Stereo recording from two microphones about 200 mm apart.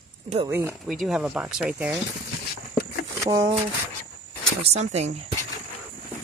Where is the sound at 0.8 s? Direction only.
Centre (ahead or behind).